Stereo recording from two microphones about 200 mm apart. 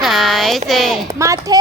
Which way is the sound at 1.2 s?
15° right (ahead or behind).